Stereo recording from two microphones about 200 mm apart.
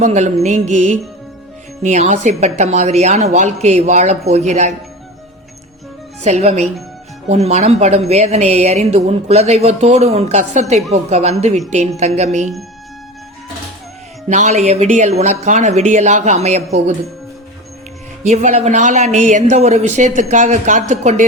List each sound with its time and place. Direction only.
0.0 s speech: 35° right (ahead or behind)
6.2 s speech: 35° right (ahead or behind)
14.3 s speech: 35° right (ahead or behind)
18.2 s speech: 35° right (ahead or behind)